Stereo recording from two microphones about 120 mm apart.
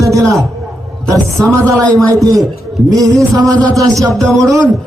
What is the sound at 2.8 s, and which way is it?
Speech, 30° right (ahead or behind).